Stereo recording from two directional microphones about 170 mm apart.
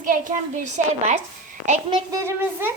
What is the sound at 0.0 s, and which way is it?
A woman's voice, 50° right (ahead or behind).